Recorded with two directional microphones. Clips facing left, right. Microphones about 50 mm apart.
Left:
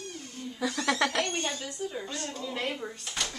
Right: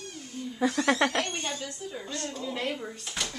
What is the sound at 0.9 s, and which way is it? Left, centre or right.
Speech, right.